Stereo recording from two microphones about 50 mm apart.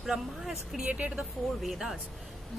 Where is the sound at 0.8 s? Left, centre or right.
Right.